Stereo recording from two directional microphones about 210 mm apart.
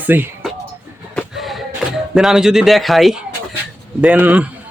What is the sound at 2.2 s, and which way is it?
Speech, centre (ahead or behind).